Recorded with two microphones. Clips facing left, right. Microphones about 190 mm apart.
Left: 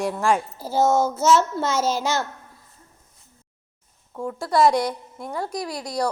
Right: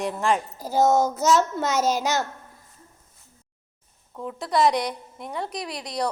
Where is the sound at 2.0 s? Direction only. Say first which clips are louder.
Even; 40° right (ahead or behind).